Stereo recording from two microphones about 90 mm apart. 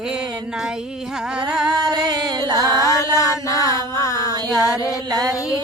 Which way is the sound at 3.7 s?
40° left (ahead or behind).